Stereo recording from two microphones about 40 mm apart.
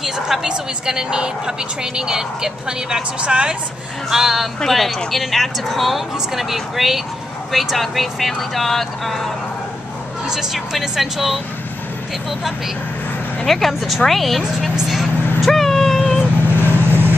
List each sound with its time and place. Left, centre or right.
0.0 s speech: centre
0.5 s a woman's voice: centre
4.1 s speech: centre
4.6 s speech: centre
10.2 s speech: centre
13.5 s speech: centre
15.4 s vehicle: centre
16.4 s vehicle: left
16.7 s vehicle: right